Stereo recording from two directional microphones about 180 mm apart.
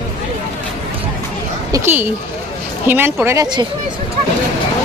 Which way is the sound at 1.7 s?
10° right (ahead or behind).